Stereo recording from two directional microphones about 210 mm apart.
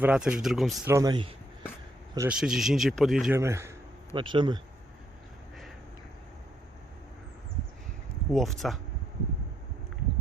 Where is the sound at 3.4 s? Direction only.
15° right (ahead or behind).